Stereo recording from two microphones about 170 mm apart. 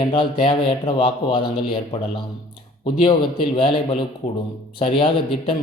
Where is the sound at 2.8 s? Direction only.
25° left (ahead or behind).